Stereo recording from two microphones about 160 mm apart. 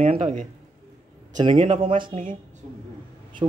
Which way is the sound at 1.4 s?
30° right (ahead or behind).